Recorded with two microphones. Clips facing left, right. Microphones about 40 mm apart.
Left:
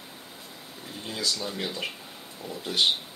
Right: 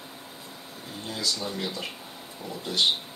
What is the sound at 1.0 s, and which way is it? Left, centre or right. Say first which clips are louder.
Speech: even; left.